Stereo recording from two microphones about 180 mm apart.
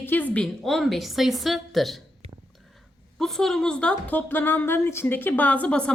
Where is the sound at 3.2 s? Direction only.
Centre (ahead or behind).